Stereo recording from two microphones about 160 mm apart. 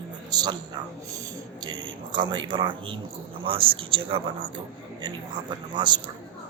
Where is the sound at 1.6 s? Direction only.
30° right (ahead or behind).